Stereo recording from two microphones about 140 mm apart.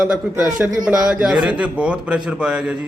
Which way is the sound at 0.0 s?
5° right (ahead or behind).